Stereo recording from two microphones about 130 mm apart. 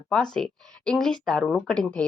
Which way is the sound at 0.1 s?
5° left (ahead or behind).